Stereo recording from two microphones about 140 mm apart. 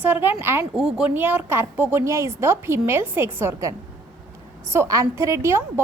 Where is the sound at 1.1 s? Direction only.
15° right (ahead or behind).